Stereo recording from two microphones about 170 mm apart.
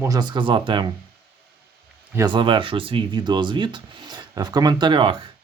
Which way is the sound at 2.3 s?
30° right (ahead or behind).